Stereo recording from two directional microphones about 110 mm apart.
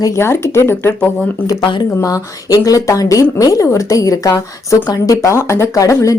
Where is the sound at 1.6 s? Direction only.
50° left (ahead or behind).